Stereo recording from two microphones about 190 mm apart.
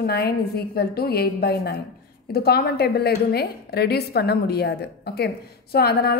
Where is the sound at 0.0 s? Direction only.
55° left (ahead or behind).